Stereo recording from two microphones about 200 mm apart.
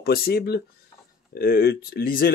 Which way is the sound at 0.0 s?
50° left (ahead or behind).